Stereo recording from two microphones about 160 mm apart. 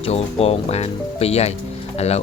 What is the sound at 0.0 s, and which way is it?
Speech, 40° left (ahead or behind).